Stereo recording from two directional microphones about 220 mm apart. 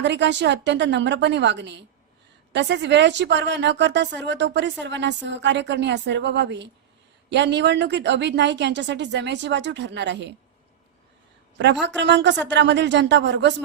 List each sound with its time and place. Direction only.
0.0 s a woman's voice: 55° right (ahead or behind)
11.5 s a woman's voice: 50° right (ahead or behind)